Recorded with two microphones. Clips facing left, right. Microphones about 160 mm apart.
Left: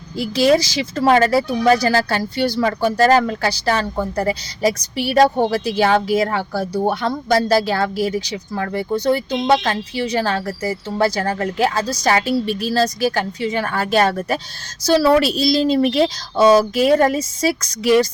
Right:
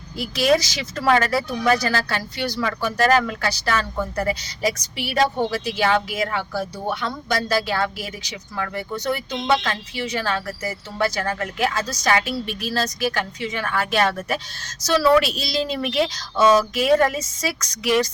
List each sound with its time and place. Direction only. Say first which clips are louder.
0.2 s speech: left 4 dB; 30° left (ahead or behind)